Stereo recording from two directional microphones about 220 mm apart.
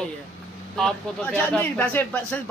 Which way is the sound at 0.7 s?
5° left (ahead or behind).